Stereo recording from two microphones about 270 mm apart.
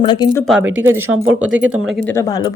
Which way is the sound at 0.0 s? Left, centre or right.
Centre.